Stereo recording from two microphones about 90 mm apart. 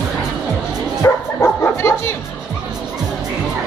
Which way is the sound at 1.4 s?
25° left (ahead or behind).